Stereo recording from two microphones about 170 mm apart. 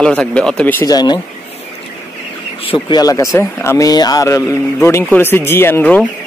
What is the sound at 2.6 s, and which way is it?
Speech, 25° left (ahead or behind).